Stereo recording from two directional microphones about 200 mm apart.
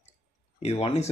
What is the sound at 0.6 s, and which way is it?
Speech, 30° left (ahead or behind).